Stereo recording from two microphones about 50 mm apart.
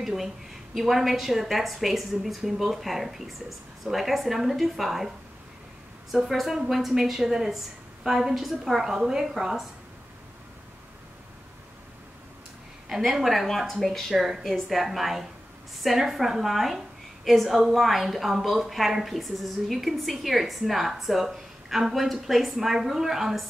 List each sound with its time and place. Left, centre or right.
0.0 s a woman's voice: centre
6.1 s a woman's voice: centre
13.1 s a woman's voice: centre